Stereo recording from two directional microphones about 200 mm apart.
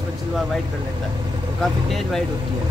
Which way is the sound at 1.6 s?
Centre (ahead or behind).